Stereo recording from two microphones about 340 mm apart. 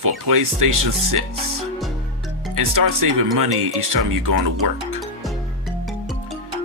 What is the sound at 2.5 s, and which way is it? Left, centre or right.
Speech, right.